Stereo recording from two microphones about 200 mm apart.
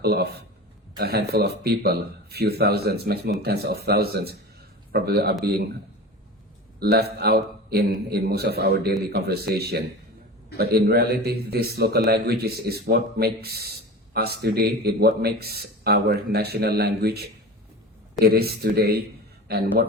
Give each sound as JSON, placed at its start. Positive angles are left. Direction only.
{"t": 0.0, "sound": "speech", "side_deg": -55}
{"t": 6.7, "sound": "speech", "side_deg": -50}